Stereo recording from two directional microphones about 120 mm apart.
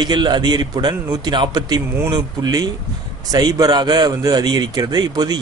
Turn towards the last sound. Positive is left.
turn(degrees=-35)  # may be behind; listen again after turning